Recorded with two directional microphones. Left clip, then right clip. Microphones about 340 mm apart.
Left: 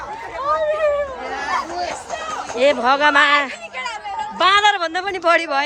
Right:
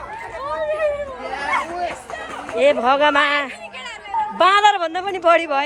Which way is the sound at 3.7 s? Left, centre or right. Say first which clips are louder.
Left 6 dB; left.